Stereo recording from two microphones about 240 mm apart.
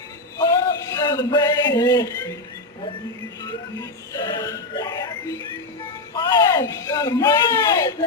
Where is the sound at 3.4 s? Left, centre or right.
Centre.